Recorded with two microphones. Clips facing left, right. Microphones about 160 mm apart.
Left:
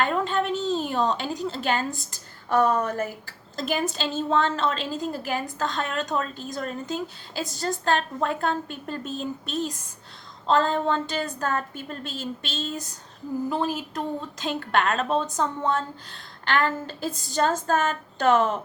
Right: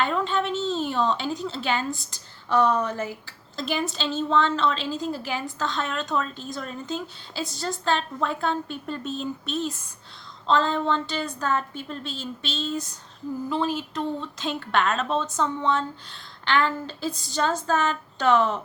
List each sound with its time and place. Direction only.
0.0 s a sound: 45° left (ahead or behind)
0.9 s a woman's voice: 45° left (ahead or behind)
14.2 s a woman's voice: 45° left (ahead or behind)